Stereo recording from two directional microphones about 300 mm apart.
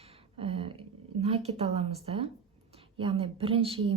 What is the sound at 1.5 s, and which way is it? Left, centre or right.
A woman's voice, centre.